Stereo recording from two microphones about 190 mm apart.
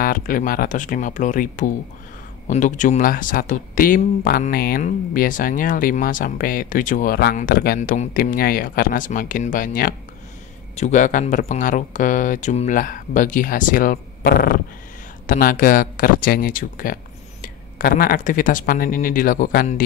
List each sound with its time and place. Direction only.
0.0 s speech: 50° left (ahead or behind)